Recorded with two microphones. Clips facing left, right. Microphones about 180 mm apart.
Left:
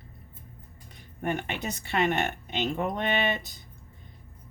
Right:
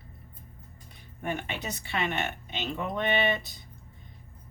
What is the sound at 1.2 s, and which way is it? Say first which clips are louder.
Speech: left 3 dB; 50° left (ahead or behind).